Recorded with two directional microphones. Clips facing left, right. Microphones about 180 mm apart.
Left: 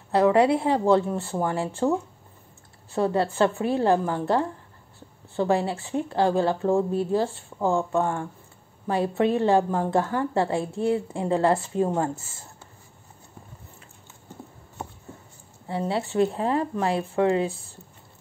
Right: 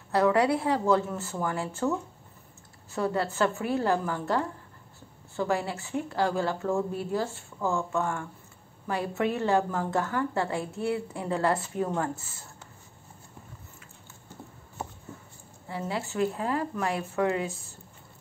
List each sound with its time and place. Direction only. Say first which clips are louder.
0.1 s speech: left 4 dB; 25° left (ahead or behind)
15.7 s speech: left 6 dB; 30° left (ahead or behind)